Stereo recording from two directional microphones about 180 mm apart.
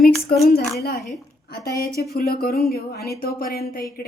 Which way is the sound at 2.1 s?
60° left (ahead or behind).